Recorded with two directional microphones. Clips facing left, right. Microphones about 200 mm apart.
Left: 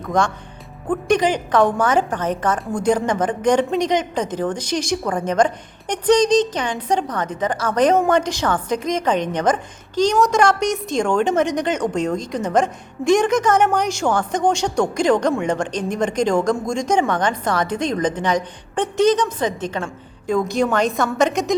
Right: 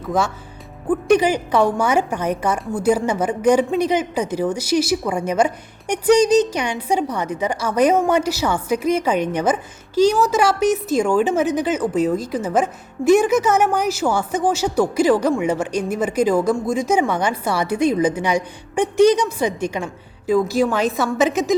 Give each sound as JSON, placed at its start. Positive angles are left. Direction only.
{"t": 0.0, "sound": "a woman's voice", "side_deg": -5}